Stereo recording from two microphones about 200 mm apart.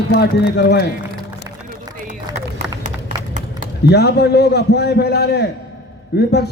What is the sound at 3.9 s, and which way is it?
A man's voice, 55° left (ahead or behind).